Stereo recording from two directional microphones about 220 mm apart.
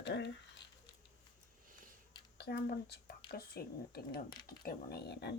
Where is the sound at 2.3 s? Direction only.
50° left (ahead or behind).